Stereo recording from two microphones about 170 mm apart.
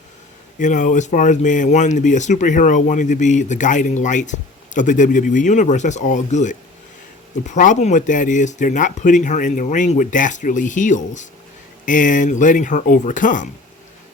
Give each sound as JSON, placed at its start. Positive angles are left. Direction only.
{"t": 0.6, "sound": "speech", "side_deg": 50}